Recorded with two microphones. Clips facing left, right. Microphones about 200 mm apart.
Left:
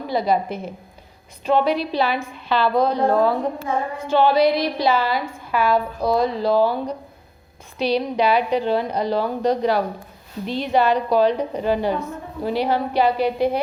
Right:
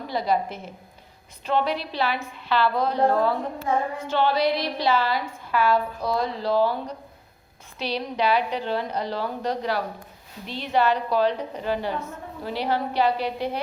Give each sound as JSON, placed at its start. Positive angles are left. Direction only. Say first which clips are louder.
{"t": 0.1, "sound": "a woman's voice", "louder": "left 4 dB", "side_deg": 15}